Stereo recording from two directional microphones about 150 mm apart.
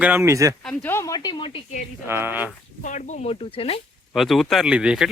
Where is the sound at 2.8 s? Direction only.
55° left (ahead or behind); by 3.8 s 40° left (ahead or behind).